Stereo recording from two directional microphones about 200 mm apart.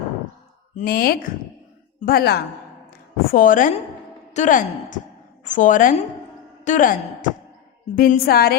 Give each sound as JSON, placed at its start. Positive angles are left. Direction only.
{"t": 0.8, "sound": "a woman's voice", "side_deg": 50}